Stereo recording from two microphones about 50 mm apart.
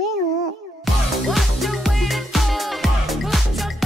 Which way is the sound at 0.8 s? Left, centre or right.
Centre.